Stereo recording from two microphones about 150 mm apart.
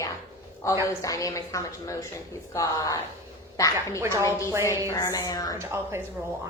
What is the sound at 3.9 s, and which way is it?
Speech, 20° right (ahead or behind).